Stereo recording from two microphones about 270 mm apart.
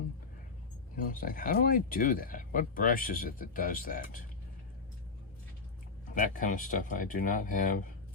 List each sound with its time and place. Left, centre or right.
0.9 s speech: left
6.1 s speech: left